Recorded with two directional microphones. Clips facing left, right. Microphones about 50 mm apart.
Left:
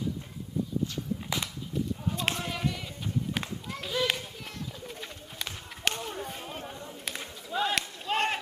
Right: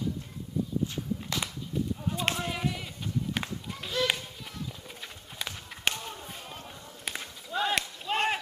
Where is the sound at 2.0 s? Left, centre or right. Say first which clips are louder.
Right 1 dB; centre.